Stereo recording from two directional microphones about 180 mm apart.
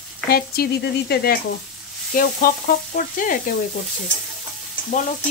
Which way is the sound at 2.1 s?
55° left (ahead or behind).